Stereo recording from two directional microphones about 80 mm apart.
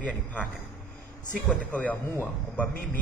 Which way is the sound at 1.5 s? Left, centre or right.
Centre.